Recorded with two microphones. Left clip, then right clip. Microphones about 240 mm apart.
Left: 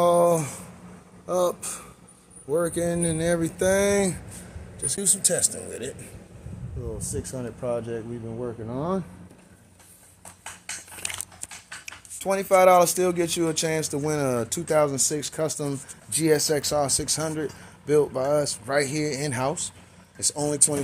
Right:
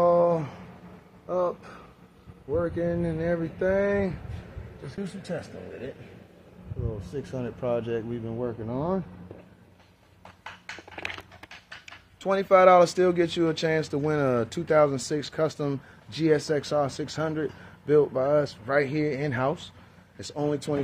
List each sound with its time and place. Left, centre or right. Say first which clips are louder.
0.0 s a sound: left 2 dB; left
1.2 s speech: left 3 dB; left
7.0 s speech: left 1 dB; centre
11.8 s speech: left 1 dB; centre